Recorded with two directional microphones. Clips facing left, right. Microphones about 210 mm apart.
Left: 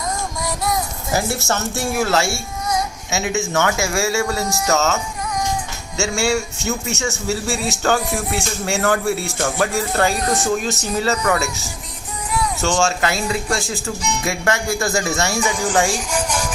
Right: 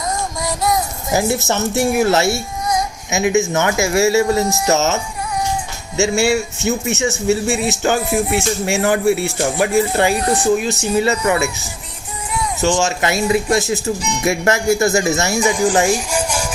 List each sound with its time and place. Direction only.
1.1 s speech: 20° right (ahead or behind)
6.0 s speech: 20° right (ahead or behind)
12.5 s speech: 15° right (ahead or behind)